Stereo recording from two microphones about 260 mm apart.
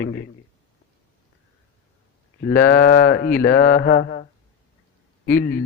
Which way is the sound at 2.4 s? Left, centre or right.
Left.